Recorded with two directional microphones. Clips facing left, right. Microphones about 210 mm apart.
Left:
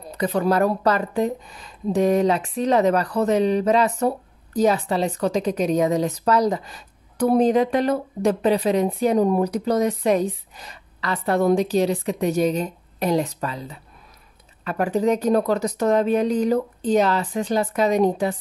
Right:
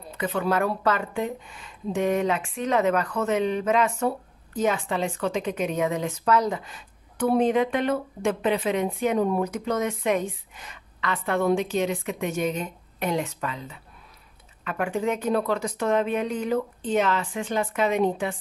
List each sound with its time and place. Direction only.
0.1 s a woman's voice: 40° left (ahead or behind)